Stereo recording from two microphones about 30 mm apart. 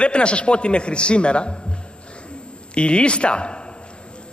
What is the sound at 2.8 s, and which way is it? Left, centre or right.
Speech, left.